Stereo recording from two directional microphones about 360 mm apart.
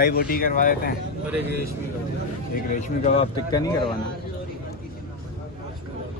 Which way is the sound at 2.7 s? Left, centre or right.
Centre.